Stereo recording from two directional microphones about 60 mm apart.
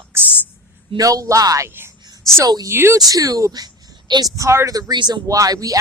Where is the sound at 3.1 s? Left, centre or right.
Right.